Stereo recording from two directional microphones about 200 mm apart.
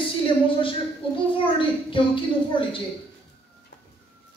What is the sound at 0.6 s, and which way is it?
A child's voice, 25° left (ahead or behind).